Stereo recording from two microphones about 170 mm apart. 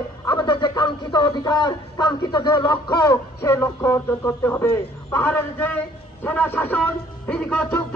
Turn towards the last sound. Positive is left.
turn(degrees=5)  # may be behind; listen again after turning